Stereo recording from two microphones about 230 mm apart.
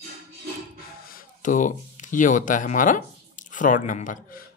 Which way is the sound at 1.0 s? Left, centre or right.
Left.